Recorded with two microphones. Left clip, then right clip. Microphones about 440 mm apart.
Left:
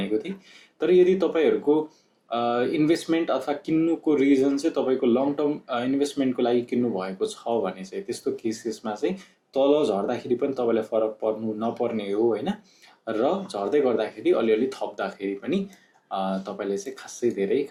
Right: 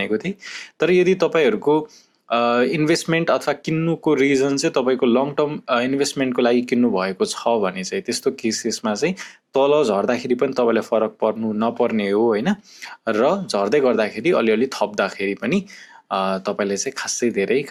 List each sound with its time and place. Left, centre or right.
0.8 s speech: right